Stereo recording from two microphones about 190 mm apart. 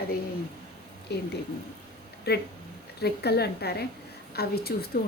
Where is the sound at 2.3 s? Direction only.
55° left (ahead or behind).